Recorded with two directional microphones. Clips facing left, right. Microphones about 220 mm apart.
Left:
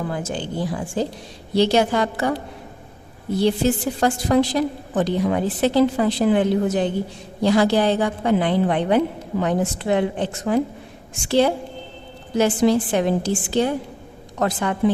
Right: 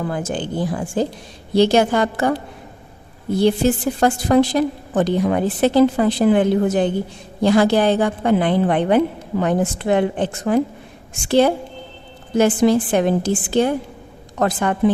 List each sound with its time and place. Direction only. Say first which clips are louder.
0.1 s a woman's voice: right 3 dB; 50° right (ahead or behind)
3.3 s a woman's voice: right 3 dB; 55° right (ahead or behind)